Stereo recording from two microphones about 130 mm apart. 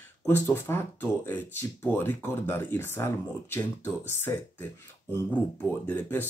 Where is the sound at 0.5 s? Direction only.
20° left (ahead or behind).